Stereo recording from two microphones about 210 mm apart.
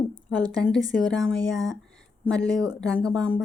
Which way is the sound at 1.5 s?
15° right (ahead or behind).